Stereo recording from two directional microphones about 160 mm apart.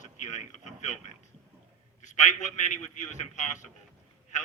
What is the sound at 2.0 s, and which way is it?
A man's voice, 50° left (ahead or behind).